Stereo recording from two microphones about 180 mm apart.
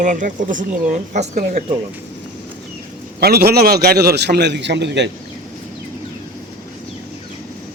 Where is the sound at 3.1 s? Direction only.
60° right (ahead or behind); by 5.1 s 75° right (ahead or behind).